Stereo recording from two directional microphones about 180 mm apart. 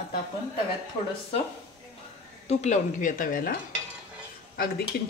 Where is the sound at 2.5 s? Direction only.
40° left (ahead or behind).